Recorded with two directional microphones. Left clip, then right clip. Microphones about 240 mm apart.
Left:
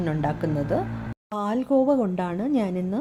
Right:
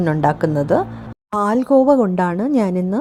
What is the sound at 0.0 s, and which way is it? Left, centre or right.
A woman's voice, right.